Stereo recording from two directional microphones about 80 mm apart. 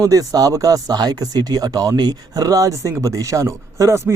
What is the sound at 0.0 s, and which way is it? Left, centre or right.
A man's voice, right.